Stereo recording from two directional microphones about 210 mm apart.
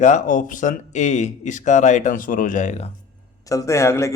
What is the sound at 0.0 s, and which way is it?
A man's voice, 35° left (ahead or behind).